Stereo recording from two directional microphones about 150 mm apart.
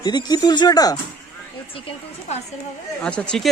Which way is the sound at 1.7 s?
35° left (ahead or behind).